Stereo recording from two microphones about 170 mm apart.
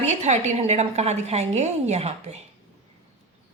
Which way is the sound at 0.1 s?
40° right (ahead or behind).